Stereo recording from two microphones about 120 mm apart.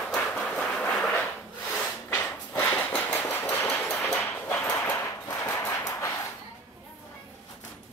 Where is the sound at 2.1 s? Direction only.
15° left (ahead or behind).